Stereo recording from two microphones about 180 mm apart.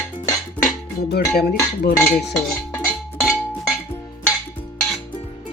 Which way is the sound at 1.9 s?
15° left (ahead or behind).